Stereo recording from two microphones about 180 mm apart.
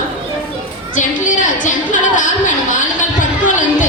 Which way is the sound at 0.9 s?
45° left (ahead or behind).